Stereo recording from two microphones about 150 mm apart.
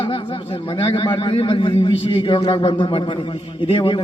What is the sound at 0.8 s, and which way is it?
A man's voice, 35° left (ahead or behind).